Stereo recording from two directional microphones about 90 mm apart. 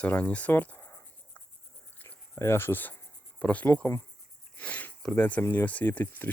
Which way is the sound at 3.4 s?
15° left (ahead or behind).